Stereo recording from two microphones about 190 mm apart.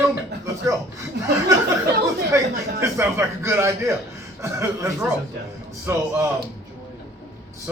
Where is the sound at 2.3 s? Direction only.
15° right (ahead or behind).